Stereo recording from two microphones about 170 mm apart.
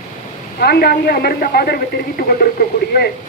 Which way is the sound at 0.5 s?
65° left (ahead or behind).